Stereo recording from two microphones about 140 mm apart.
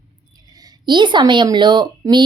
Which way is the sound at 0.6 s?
35° right (ahead or behind).